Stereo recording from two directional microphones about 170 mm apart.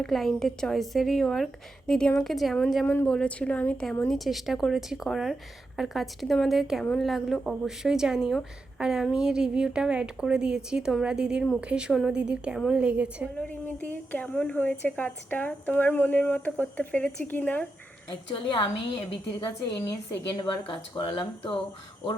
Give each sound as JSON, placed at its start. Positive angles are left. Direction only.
{"t": 0.0, "sound": "a woman's voice", "side_deg": 0}
{"t": 13.3, "sound": "a woman's voice", "side_deg": 10}
{"t": 18.1, "sound": "speech", "side_deg": 30}